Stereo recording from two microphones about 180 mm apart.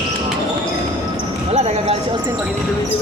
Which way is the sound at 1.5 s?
35° right (ahead or behind).